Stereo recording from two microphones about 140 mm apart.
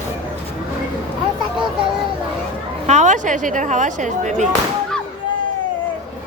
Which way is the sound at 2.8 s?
60° right (ahead or behind).